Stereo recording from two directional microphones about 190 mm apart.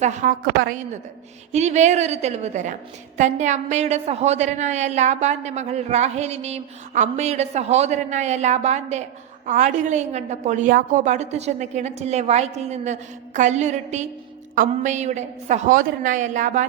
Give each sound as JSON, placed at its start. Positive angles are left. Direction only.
{"t": 0.0, "sound": "a woman's voice", "side_deg": -40}